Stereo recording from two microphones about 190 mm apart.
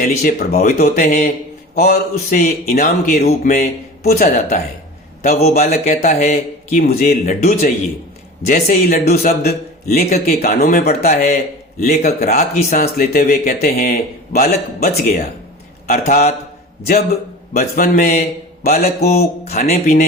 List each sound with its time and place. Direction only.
0.0 s speech: 50° left (ahead or behind)
3.2 s speech: 40° left (ahead or behind)
5.4 s speech: 35° left (ahead or behind)
6.7 s speech: 50° left (ahead or behind)
8.6 s speech: 50° left (ahead or behind)
15.9 s speech: 40° left (ahead or behind)
16.8 s a man's voice: 50° left (ahead or behind)
19.5 s speech: 35° left (ahead or behind)